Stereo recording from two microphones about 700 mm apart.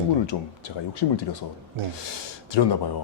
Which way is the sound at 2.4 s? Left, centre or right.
Left.